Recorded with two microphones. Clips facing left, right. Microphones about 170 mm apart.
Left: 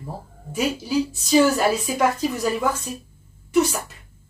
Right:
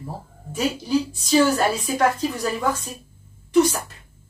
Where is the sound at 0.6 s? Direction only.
10° left (ahead or behind).